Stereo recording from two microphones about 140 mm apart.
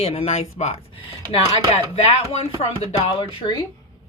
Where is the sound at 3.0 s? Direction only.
35° left (ahead or behind).